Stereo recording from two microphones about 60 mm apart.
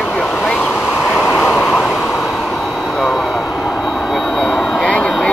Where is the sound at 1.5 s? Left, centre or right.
Centre.